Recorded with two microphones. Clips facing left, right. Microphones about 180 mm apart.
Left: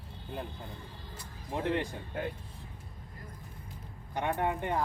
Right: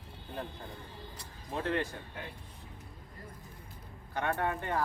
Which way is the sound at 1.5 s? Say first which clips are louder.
Left 1 dB; 15° left (ahead or behind).